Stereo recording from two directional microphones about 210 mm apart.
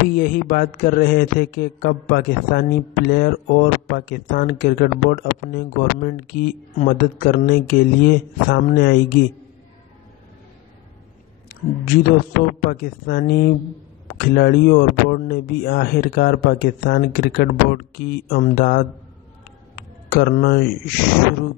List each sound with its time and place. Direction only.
0.1 s a man's voice: 45° left (ahead or behind)
11.8 s a man's voice: 45° left (ahead or behind)